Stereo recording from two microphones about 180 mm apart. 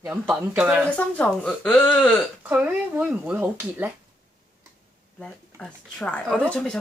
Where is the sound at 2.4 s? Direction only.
10° right (ahead or behind).